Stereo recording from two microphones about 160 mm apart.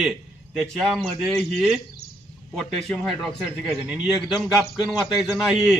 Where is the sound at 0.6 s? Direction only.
Centre (ahead or behind).